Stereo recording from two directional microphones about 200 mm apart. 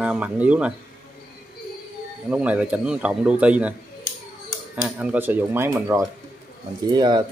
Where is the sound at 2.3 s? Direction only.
5° right (ahead or behind).